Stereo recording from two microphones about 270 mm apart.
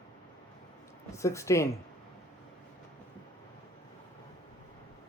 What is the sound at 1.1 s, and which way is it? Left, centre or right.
Speech, centre.